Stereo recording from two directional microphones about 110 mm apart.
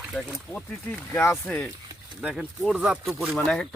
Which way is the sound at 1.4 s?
10° left (ahead or behind).